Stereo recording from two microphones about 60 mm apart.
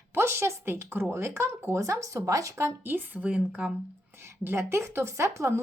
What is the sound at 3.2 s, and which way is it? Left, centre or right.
Speech, right.